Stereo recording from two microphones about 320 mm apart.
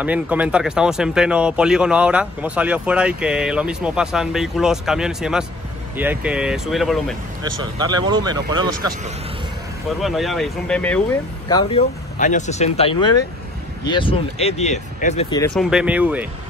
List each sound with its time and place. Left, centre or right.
0.0 s speech: centre
7.8 s speech: centre
10.0 s speech: centre
11.4 s speech: centre
15.5 s speech: centre